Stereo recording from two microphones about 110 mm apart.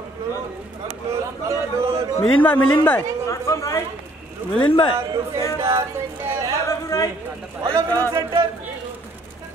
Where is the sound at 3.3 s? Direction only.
30° left (ahead or behind).